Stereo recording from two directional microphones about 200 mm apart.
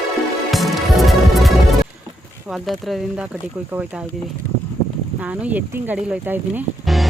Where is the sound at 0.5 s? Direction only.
Centre (ahead or behind).